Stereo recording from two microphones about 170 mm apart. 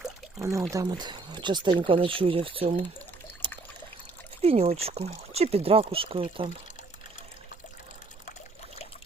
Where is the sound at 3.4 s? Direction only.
30° right (ahead or behind).